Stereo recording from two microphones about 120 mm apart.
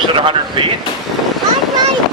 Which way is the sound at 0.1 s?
45° right (ahead or behind).